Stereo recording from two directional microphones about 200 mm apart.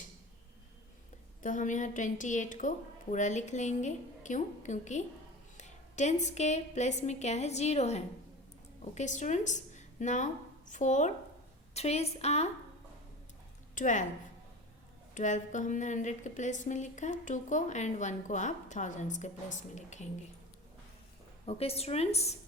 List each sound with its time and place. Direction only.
1.4 s a woman's voice: 40° left (ahead or behind)
13.7 s a woman's voice: 40° left (ahead or behind)
15.1 s a woman's voice: 40° left (ahead or behind)
21.4 s a woman's voice: 30° left (ahead or behind)